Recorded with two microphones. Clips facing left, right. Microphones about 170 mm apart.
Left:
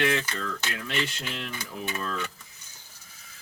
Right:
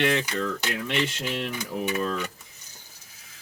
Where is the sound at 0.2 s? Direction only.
20° right (ahead or behind).